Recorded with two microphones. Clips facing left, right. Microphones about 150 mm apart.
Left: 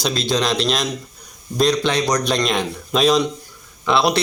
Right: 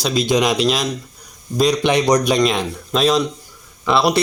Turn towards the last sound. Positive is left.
turn(degrees=-5)  # may be behind; listen again after turning